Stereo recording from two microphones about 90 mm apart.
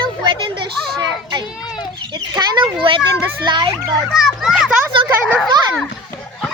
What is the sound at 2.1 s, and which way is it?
A child's voice, 50° right (ahead or behind).